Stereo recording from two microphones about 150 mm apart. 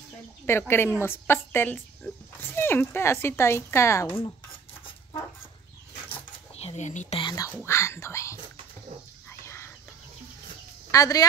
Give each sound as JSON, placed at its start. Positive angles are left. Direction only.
{"t": 0.5, "sound": "speech", "side_deg": 15}
{"t": 6.5, "sound": "speech", "side_deg": 45}
{"t": 7.2, "sound": "speech", "side_deg": 30}
{"t": 7.6, "sound": "speech", "side_deg": 20}
{"t": 9.3, "sound": "a sound", "side_deg": 15}
{"t": 10.9, "sound": "speech", "side_deg": 25}